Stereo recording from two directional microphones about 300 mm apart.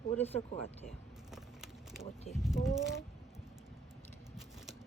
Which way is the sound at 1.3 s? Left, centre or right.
Centre.